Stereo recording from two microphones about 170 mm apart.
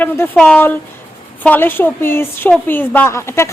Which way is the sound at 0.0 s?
10° left (ahead or behind).